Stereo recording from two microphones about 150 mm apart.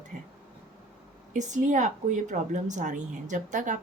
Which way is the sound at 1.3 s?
55° right (ahead or behind).